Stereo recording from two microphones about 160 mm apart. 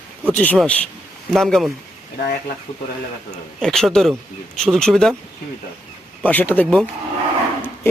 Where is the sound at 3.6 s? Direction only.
Centre (ahead or behind).